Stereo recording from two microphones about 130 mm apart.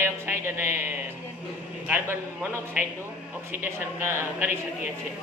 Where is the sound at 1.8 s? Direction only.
15° right (ahead or behind).